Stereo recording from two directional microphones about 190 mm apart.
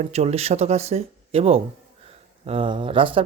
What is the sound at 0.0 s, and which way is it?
Speech, 35° right (ahead or behind).